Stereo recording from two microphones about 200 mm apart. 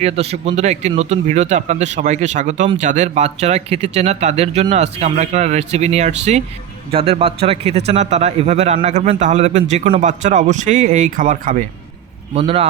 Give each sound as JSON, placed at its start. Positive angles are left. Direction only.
{"t": 0.0, "sound": "a man's voice", "side_deg": -30}
{"t": 12.3, "sound": "a man's voice", "side_deg": -30}